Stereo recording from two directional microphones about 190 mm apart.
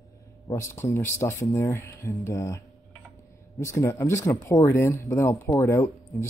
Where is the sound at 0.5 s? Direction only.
15° left (ahead or behind).